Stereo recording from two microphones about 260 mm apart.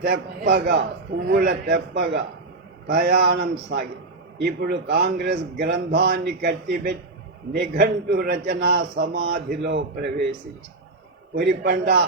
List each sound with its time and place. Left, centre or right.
0.0 s a man's voice: right
11.3 s a man's voice: right